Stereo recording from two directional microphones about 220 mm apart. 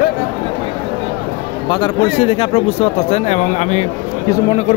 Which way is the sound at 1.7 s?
25° left (ahead or behind).